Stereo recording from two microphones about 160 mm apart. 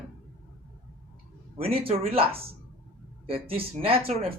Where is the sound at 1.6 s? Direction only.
35° right (ahead or behind).